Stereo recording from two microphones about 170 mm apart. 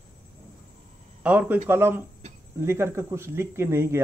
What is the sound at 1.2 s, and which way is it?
Speech, 10° right (ahead or behind).